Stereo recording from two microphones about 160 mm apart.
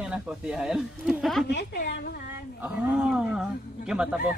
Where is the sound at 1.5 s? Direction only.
90° left.